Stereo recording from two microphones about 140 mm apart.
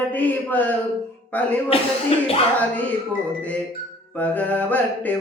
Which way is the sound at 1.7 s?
40° left (ahead or behind).